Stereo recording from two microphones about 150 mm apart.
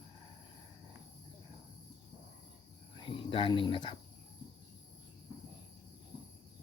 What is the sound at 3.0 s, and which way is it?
Speech, 35° left (ahead or behind).